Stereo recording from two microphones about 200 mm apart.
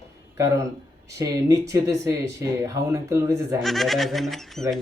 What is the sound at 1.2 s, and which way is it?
Speech, 15° right (ahead or behind).